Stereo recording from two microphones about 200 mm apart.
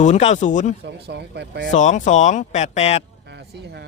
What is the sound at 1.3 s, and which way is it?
Speech, 55° right (ahead or behind).